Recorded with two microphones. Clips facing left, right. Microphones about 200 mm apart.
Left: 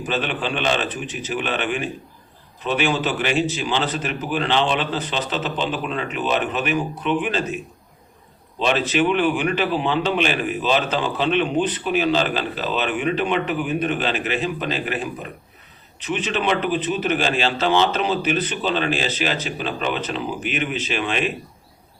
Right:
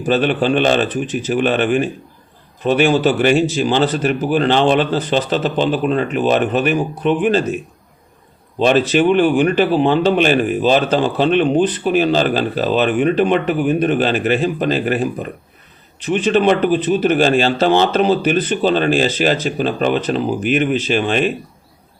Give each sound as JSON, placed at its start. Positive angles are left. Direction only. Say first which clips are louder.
{"t": 0.0, "sound": "speech", "louder": "right 9 dB", "side_deg": -40}
{"t": 8.5, "sound": "speech", "louder": "right 7 dB", "side_deg": -40}
{"t": 16.1, "sound": "speech", "louder": "right 8 dB", "side_deg": -40}